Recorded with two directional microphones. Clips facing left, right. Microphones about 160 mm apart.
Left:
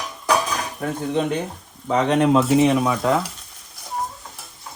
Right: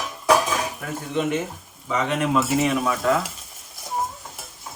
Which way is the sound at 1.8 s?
35° left (ahead or behind).